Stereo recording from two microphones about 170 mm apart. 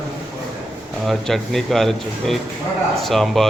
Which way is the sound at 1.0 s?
Centre (ahead or behind).